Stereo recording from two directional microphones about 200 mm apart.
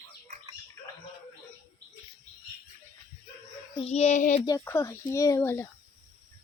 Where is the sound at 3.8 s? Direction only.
30° left (ahead or behind).